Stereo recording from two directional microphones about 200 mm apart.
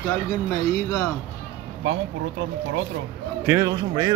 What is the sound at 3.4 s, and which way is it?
Speech, 15° right (ahead or behind).